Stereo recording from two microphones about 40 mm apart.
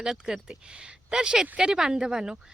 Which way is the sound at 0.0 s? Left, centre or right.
Centre.